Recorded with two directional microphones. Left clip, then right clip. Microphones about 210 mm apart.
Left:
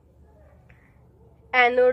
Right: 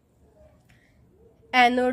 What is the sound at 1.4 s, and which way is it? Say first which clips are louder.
Speech: left 2 dB; 45° right (ahead or behind).